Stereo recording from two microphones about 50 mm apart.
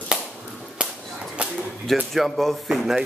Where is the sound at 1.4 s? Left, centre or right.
Right.